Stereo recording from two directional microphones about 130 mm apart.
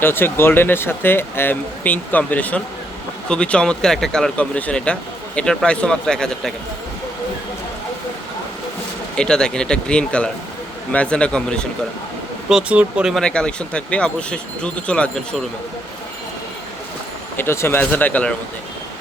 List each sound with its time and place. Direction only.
0.0 s speech: 15° left (ahead or behind)
9.1 s speech: 5° left (ahead or behind)
12.5 s speech: 5° right (ahead or behind)
13.1 s speech: 5° left (ahead or behind)
17.3 s speech: 20° left (ahead or behind)